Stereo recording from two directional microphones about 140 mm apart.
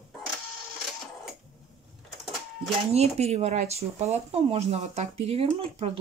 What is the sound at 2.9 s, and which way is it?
Speech, 50° right (ahead or behind).